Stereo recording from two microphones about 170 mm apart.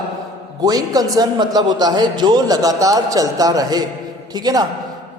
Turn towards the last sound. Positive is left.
turn(degrees=-25)  # may be behind; listen again after turning